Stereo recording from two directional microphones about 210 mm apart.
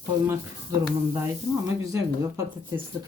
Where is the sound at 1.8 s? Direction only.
15° right (ahead or behind).